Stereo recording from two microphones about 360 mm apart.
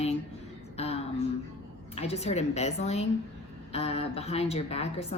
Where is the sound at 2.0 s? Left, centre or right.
Centre.